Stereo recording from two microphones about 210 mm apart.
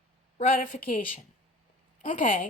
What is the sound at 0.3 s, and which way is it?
Speech, 40° left (ahead or behind).